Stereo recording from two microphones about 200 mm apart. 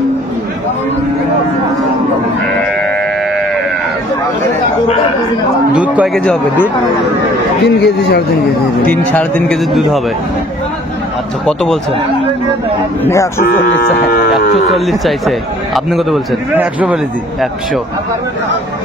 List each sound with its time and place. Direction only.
5.7 s speech: 5° right (ahead or behind)
7.6 s a man's voice: 55° left (ahead or behind)
8.8 s speech: 10° left (ahead or behind)
11.4 s speech: centre (ahead or behind)
13.0 s speech: 15° left (ahead or behind)
13.4 s speech: 50° left (ahead or behind)
14.3 s speech: centre (ahead or behind)